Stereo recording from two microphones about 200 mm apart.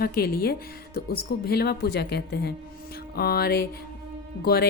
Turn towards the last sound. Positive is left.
turn(degrees=50)  # may be behind; listen again after turning